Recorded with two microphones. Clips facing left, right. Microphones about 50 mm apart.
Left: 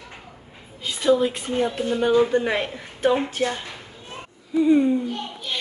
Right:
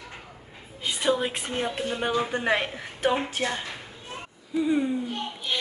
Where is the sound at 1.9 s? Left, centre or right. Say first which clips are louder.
Left 10 dB; centre.